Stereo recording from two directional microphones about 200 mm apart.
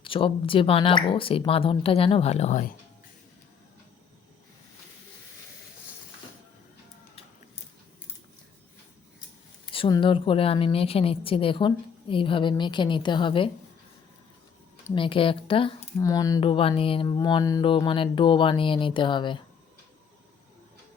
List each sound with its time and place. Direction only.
0.0 s a woman's voice: 25° left (ahead or behind)
9.7 s a woman's voice: 25° left (ahead or behind)
14.9 s a woman's voice: 25° left (ahead or behind)